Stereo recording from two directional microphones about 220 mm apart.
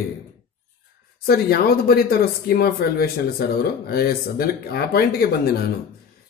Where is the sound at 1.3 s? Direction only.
45° left (ahead or behind).